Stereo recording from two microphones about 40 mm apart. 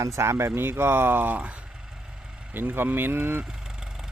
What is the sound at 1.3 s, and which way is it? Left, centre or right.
Speech, right.